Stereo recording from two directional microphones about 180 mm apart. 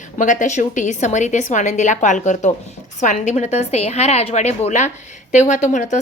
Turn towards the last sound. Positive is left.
turn(degrees=40)  # may be behind; listen again after turning